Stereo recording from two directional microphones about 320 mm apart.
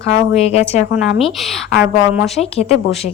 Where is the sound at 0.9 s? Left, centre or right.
Centre.